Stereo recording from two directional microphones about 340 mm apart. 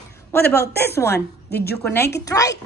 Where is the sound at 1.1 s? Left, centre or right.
Left.